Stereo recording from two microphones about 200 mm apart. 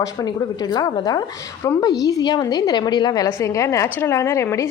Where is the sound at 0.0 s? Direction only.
20° left (ahead or behind).